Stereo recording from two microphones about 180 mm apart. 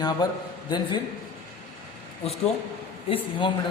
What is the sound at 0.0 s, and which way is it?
Speech, 20° left (ahead or behind).